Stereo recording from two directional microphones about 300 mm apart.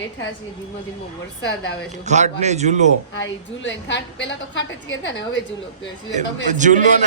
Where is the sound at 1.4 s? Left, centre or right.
Left.